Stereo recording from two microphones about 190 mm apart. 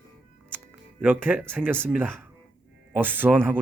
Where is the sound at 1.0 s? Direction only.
10° right (ahead or behind).